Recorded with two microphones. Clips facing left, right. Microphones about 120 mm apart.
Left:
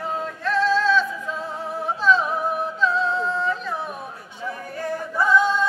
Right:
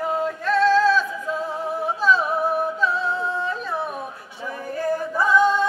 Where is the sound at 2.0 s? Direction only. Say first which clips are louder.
Left 1 dB; 5° right (ahead or behind).